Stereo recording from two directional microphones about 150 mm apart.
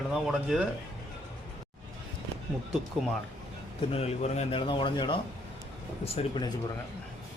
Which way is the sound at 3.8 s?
45° left (ahead or behind).